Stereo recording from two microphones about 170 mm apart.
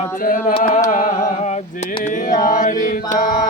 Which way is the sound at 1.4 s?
40° left (ahead or behind).